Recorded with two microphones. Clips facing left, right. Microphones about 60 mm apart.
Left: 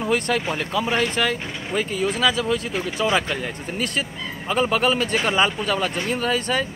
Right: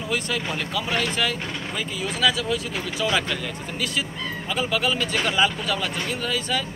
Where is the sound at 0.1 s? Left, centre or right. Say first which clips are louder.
Left 4 dB; left.